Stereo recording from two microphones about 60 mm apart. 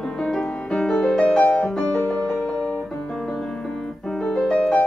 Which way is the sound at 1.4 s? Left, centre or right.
Centre.